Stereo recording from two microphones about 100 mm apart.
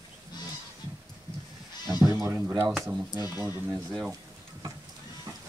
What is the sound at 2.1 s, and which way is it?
Speech, 35° right (ahead or behind).